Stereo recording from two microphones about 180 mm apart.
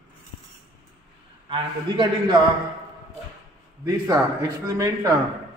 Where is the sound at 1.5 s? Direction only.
25° right (ahead or behind).